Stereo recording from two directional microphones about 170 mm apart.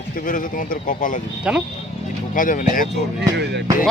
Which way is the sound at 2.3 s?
50° left (ahead or behind).